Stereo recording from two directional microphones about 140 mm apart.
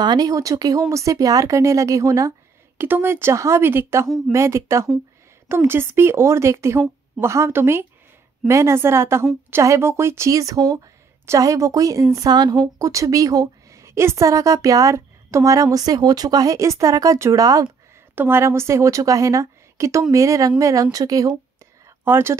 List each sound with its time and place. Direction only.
0.0 s a woman's voice: 30° right (ahead or behind)